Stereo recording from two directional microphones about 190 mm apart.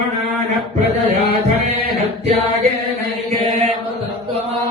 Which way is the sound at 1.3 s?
35° right (ahead or behind).